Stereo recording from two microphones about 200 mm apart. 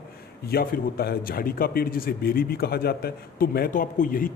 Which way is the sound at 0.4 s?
50° left (ahead or behind).